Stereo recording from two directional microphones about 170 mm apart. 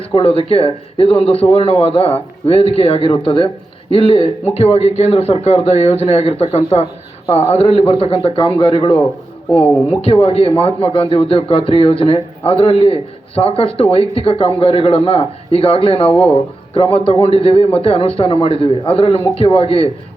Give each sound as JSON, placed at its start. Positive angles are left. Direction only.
{"t": 0.1, "sound": "a man's voice", "side_deg": 35}
{"t": 9.5, "sound": "speech", "side_deg": 10}
{"t": 10.0, "sound": "a man's voice", "side_deg": 35}
{"t": 16.0, "sound": "speech", "side_deg": 10}
{"t": 16.7, "sound": "a man's voice", "side_deg": 35}